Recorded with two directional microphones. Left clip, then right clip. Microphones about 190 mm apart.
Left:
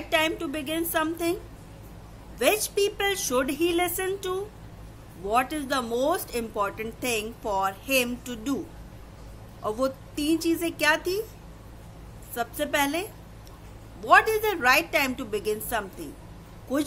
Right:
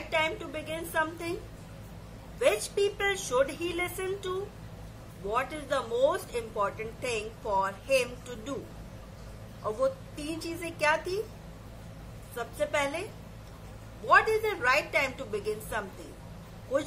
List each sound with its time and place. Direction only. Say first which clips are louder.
0.1 s speech: left 5 dB; 50° left (ahead or behind)
2.4 s speech: left 3 dB; 50° left (ahead or behind)
5.3 s speech: left 5 dB; 50° left (ahead or behind)
9.8 s speech: even; 50° left (ahead or behind)
12.4 s speech: left 4 dB; 50° left (ahead or behind)
14.0 s speech: left 4 dB; 50° left (ahead or behind)